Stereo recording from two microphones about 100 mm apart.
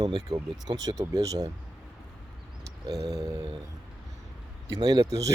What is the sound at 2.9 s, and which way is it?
Speech, 40° right (ahead or behind).